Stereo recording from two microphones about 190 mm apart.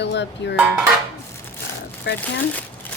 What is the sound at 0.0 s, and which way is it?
Speech, 65° left (ahead or behind).